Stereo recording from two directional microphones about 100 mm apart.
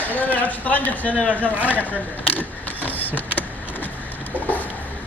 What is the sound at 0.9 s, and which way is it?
Speech, 15° left (ahead or behind).